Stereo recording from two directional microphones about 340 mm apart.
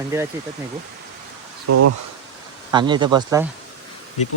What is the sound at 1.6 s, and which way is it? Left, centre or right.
Speech, right.